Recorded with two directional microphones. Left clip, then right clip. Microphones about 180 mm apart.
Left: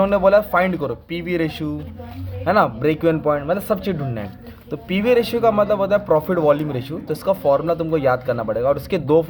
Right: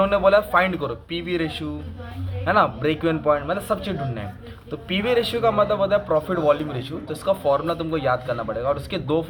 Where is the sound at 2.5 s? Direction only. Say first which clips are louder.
Left 3 dB; 40° left (ahead or behind).